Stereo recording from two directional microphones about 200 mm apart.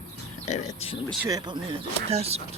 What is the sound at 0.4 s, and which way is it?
Speech, 35° left (ahead or behind).